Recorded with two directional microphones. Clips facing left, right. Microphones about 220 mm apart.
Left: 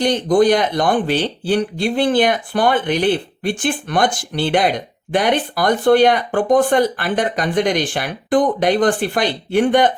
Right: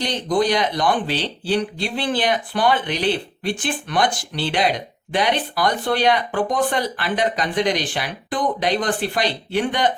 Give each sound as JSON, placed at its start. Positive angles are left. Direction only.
{"t": 0.0, "sound": "speech", "side_deg": 50}